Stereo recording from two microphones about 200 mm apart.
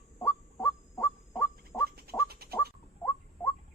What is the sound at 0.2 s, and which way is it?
Honk, 10° left (ahead or behind).